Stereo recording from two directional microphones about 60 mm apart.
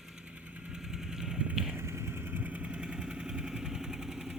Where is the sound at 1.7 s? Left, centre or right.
Right; by 4.3 s centre.